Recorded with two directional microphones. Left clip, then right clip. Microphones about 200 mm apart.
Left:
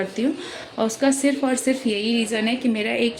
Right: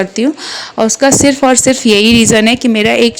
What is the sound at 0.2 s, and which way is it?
Speech, 45° right (ahead or behind).